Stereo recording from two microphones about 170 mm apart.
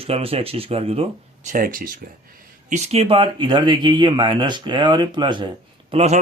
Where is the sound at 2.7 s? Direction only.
40° right (ahead or behind).